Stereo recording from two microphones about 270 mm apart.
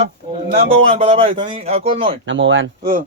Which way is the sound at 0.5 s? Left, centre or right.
Right.